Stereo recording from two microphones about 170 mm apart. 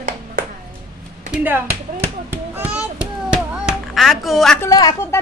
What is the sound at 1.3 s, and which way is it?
Speech, 10° right (ahead or behind).